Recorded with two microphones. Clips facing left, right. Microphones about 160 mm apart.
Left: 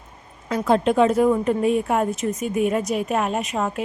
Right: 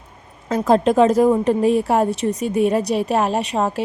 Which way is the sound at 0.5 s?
40° right (ahead or behind).